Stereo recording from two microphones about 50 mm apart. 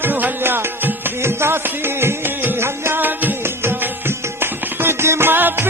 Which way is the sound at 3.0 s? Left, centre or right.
Right.